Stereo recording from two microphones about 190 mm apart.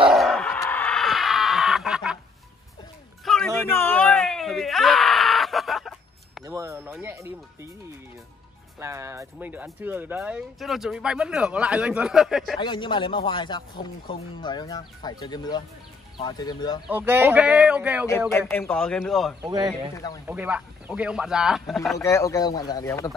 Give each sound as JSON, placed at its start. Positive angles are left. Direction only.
{"t": 0.1, "sound": "a sound", "side_deg": 0}
{"t": 0.6, "sound": "chicken", "side_deg": 10}
{"t": 3.3, "sound": "a sound", "side_deg": 0}
{"t": 6.4, "sound": "a sound", "side_deg": -15}
{"t": 6.9, "sound": "music", "side_deg": -10}
{"t": 8.7, "sound": "speech", "side_deg": -15}
{"t": 12.5, "sound": "speech", "side_deg": 25}
{"t": 16.8, "sound": "speech", "side_deg": -10}
{"t": 18.6, "sound": "speech", "side_deg": 5}
{"t": 19.4, "sound": "speech", "side_deg": -20}
{"t": 20.2, "sound": "speech", "side_deg": -10}
{"t": 21.9, "sound": "speech", "side_deg": 15}